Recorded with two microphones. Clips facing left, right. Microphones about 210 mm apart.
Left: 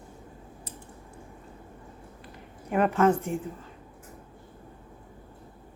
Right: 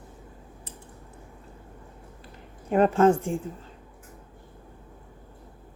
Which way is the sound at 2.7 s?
30° right (ahead or behind).